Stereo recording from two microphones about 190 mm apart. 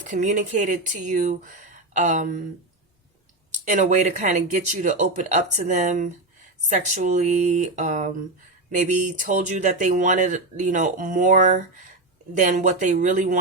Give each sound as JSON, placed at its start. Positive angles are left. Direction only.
{"t": 0.0, "sound": "speech", "side_deg": -40}
{"t": 3.7, "sound": "speech", "side_deg": -40}